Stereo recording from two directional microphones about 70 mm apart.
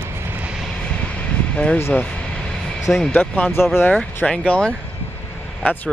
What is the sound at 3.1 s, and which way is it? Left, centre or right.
Speech, left.